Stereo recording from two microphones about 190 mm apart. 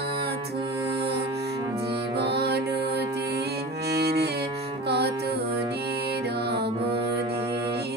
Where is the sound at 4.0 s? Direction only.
60° right (ahead or behind).